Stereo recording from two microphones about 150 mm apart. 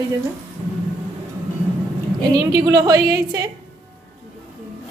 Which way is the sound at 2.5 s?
25° right (ahead or behind).